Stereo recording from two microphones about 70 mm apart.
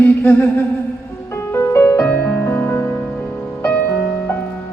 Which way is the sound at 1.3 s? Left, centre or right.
Left.